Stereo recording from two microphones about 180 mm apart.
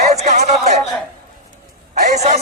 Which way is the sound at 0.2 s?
40° right (ahead or behind).